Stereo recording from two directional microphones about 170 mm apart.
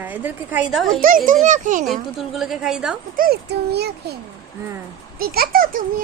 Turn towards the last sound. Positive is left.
turn(degrees=-60)  # may be behind; listen again after turning